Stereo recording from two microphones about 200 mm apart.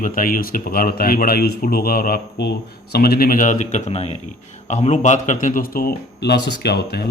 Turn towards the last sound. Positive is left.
turn(degrees=55)  # may be behind; listen again after turning